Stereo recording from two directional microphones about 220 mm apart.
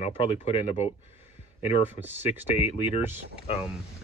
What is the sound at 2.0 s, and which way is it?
Speech, 10° right (ahead or behind).